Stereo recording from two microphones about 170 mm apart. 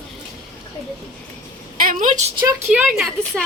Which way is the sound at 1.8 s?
50° right (ahead or behind).